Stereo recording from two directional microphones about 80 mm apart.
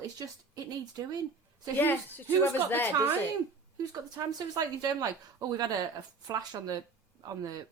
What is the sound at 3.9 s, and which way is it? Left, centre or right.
A woman's voice, right.